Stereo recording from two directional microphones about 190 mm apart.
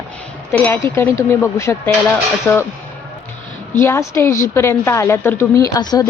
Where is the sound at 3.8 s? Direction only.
15° left (ahead or behind).